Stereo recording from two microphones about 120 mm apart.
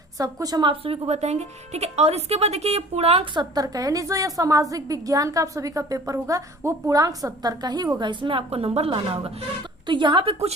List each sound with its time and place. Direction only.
0.2 s a woman's voice: 30° right (ahead or behind)
0.7 s a woman's voice: 55° right (ahead or behind)
3.3 s a woman's voice: 35° right (ahead or behind); by 9.1 s 55° right (ahead or behind)
9.8 s a woman's voice: 40° right (ahead or behind)